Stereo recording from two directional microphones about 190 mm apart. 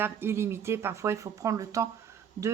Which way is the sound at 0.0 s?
10° right (ahead or behind).